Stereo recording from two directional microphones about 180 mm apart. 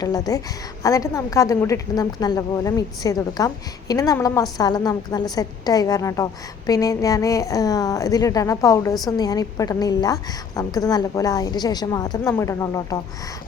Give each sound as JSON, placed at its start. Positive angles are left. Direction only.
{"t": 0.0, "sound": "a woman's voice", "side_deg": 20}